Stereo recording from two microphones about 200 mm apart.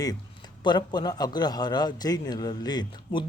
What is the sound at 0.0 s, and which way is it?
A man's voice, 20° left (ahead or behind).